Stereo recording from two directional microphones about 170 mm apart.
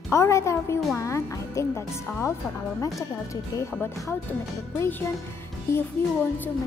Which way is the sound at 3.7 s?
10° left (ahead or behind).